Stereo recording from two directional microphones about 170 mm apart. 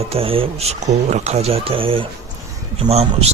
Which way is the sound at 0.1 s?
35° right (ahead or behind).